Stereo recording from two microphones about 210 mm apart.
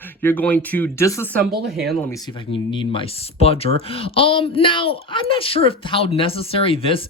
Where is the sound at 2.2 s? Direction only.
25° left (ahead or behind).